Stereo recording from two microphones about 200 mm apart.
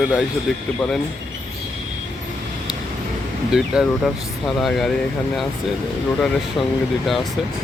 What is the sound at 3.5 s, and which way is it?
Speech, centre (ahead or behind).